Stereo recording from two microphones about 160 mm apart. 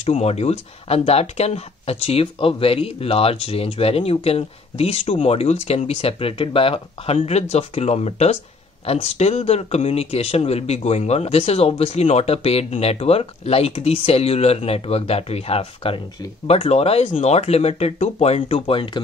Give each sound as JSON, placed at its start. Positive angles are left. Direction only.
{"t": 0.0, "sound": "speech", "side_deg": 40}